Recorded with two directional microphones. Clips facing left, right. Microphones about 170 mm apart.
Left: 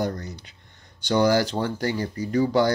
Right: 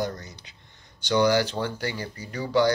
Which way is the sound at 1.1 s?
45° left (ahead or behind).